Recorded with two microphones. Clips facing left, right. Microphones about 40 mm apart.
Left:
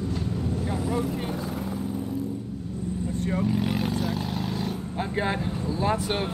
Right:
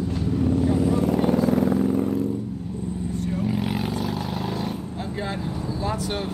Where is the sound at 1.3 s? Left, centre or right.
Right.